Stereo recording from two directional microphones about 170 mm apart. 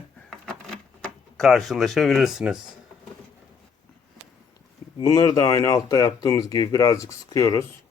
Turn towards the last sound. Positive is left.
turn(degrees=20)  # may be behind; listen again after turning